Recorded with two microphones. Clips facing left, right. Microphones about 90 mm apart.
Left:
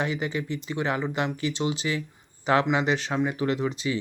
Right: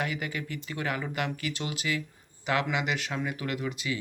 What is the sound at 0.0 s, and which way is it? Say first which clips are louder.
Speech: left 5 dB; 25° left (ahead or behind).